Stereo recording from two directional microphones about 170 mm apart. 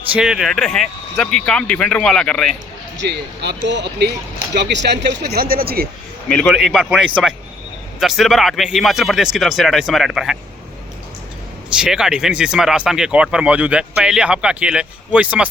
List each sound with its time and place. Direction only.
0.1 s speech: 5° right (ahead or behind)
3.0 s speech: 90° right; by 5.9 s 60° right (ahead or behind)
6.2 s speech: 5° left (ahead or behind)
11.8 s speech: 5° right (ahead or behind)